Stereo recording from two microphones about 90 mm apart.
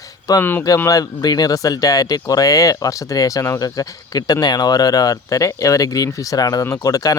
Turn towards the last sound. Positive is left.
turn(degrees=40)  # may be behind; listen again after turning